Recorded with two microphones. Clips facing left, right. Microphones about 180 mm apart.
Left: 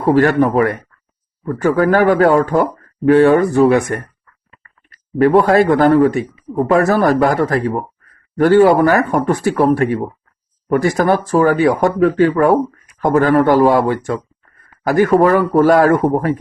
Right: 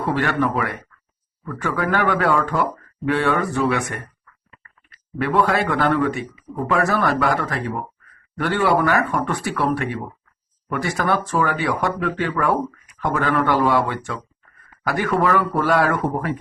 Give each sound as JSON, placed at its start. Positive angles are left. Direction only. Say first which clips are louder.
{"t": 0.0, "sound": "speech", "louder": "left 9 dB", "side_deg": 40}